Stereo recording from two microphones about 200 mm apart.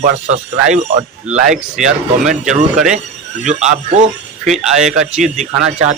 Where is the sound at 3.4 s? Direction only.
35° right (ahead or behind).